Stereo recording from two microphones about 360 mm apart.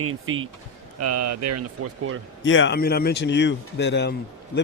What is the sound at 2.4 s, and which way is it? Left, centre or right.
Speech, left.